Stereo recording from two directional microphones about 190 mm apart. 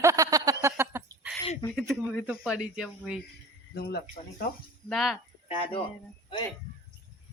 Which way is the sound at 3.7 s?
55° left (ahead or behind).